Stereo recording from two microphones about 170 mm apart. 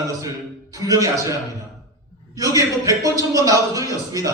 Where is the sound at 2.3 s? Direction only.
20° right (ahead or behind).